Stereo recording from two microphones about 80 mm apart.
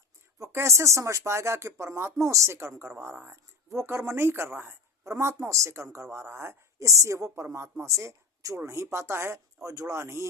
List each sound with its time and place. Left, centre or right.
0.3 s speech: right